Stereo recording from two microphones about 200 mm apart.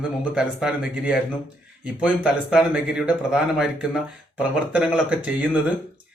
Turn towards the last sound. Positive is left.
turn(degrees=-5)  # may be behind; listen again after turning